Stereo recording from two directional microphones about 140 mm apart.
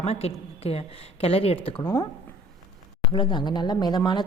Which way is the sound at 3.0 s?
35° left (ahead or behind).